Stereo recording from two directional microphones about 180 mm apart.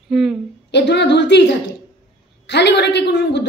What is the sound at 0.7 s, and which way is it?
Speech, 70° left (ahead or behind).